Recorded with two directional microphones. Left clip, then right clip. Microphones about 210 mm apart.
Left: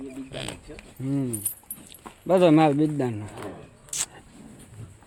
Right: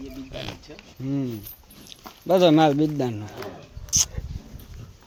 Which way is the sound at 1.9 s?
Centre (ahead or behind).